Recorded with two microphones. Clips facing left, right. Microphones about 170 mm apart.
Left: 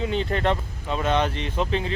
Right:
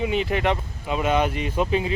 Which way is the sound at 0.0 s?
15° right (ahead or behind).